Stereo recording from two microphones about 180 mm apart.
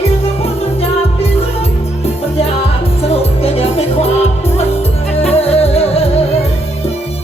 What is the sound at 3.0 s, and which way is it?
Music, 35° left (ahead or behind).